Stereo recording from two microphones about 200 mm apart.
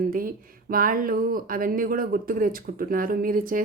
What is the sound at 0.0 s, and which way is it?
Speech, 45° right (ahead or behind).